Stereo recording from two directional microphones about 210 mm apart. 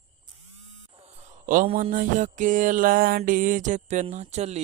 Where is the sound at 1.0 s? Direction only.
40° right (ahead or behind).